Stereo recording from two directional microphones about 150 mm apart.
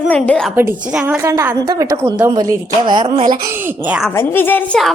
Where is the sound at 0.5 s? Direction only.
15° right (ahead or behind); by 3.1 s 30° right (ahead or behind).